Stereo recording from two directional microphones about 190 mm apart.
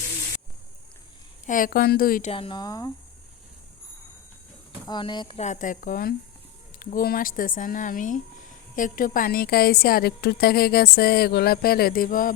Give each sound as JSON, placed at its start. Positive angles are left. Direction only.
{"t": 1.5, "sound": "speech", "side_deg": 45}
{"t": 2.3, "sound": "speech", "side_deg": 25}
{"t": 4.9, "sound": "speech", "side_deg": 25}
{"t": 5.4, "sound": "speech", "side_deg": 40}